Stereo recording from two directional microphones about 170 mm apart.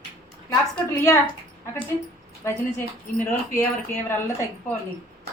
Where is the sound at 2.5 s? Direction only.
15° left (ahead or behind).